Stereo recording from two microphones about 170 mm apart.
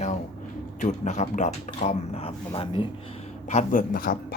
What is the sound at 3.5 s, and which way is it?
Speech, 45° left (ahead or behind).